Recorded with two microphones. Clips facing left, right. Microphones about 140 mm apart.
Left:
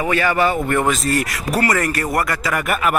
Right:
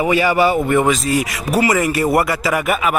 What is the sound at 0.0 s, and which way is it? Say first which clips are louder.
Speech: right 3 dB; 10° right (ahead or behind).